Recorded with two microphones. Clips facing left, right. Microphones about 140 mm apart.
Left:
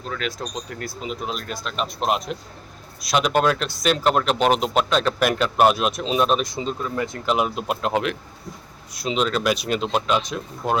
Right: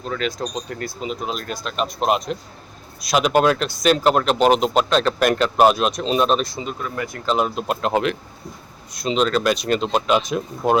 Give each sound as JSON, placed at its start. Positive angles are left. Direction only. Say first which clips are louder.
{"t": 0.0, "sound": "speech", "louder": "right 4 dB", "side_deg": 0}
{"t": 6.9, "sound": "speech", "louder": "right 1 dB", "side_deg": 20}
{"t": 7.3, "sound": "speech", "louder": "right 4 dB", "side_deg": 10}
{"t": 10.1, "sound": "speech", "louder": "right 4 dB", "side_deg": -5}